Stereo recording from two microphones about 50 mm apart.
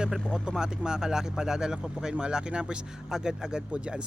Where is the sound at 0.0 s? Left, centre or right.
Centre.